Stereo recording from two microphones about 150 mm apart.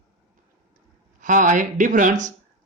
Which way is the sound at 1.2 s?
60° right (ahead or behind).